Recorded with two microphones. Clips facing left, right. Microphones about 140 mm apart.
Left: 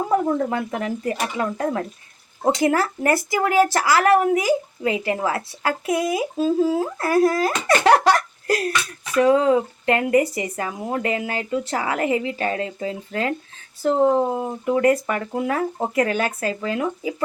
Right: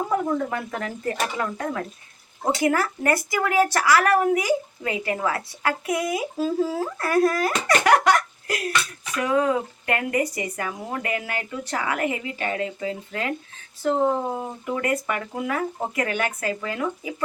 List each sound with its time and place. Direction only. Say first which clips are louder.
0.1 s a woman's voice: left 6 dB; 20° left (ahead or behind)
14.3 s speech: left 6 dB; 30° left (ahead or behind)